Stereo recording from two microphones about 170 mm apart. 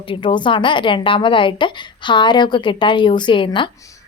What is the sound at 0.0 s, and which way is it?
A woman's voice, 30° left (ahead or behind).